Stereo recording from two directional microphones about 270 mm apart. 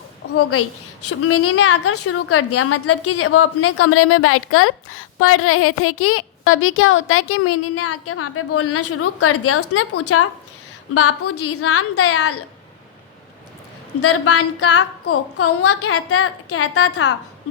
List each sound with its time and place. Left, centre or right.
1.0 s a woman's voice: left
14.0 s a woman's voice: left